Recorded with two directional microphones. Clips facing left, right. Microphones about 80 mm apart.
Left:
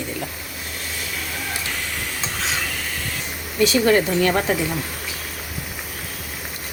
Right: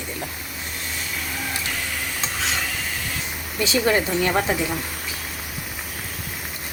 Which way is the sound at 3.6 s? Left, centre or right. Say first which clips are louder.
Left 3 dB; centre.